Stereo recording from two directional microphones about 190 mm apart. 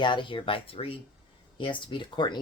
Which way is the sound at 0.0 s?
25° left (ahead or behind).